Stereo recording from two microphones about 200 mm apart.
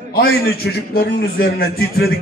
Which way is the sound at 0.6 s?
60° left (ahead or behind).